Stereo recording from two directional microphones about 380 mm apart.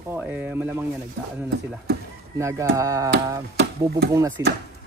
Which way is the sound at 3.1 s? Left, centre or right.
Right.